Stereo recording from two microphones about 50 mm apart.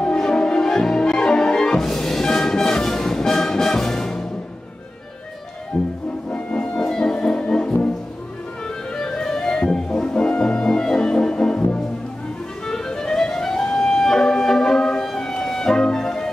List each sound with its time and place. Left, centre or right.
0.0 s music: centre
5.7 s music: centre
6.3 s brass instrument: left
8.9 s music: centre
12.6 s clarinet: centre
14.0 s music: centre